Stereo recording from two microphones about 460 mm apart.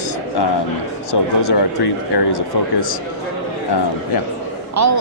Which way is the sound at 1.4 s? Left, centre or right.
Left.